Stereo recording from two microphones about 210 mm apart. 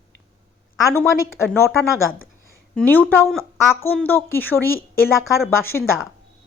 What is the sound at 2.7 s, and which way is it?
A woman's voice, 5° left (ahead or behind).